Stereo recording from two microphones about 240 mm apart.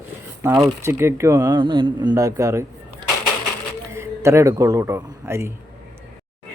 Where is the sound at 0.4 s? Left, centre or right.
Centre.